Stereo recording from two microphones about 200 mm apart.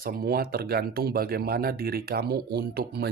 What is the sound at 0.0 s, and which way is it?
Speech, 45° right (ahead or behind).